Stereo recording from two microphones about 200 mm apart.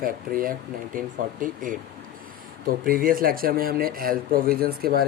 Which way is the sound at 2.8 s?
45° right (ahead or behind).